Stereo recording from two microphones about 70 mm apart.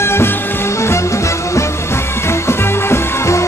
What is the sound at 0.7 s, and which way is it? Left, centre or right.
Music, left.